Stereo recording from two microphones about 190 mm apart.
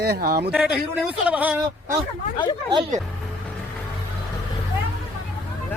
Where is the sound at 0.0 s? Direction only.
55° right (ahead or behind).